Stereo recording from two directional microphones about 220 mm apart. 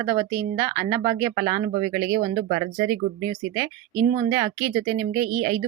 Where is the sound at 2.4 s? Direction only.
35° right (ahead or behind).